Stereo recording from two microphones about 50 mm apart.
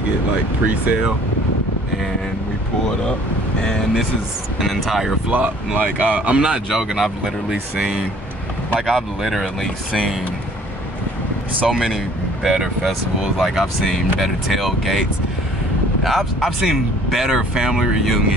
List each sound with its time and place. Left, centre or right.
4.7 s speech: centre
5.3 s speech: right
6.7 s speech: centre
11.6 s speech: centre